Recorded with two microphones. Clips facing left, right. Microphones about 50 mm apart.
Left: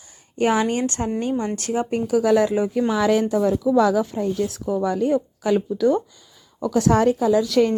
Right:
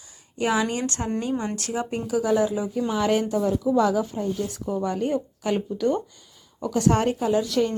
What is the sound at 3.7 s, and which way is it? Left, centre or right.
Speech, left.